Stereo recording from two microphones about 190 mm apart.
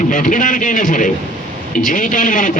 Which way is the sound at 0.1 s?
45° left (ahead or behind).